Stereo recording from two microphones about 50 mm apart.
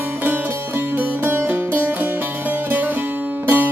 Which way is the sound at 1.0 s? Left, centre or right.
Right.